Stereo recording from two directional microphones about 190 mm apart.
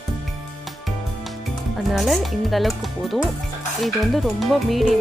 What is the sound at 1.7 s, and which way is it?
Speech, centre (ahead or behind).